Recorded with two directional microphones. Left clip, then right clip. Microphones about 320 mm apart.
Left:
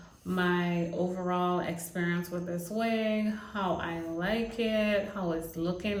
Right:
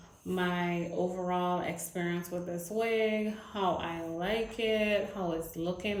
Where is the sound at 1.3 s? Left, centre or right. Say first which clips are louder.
Left 3 dB; centre.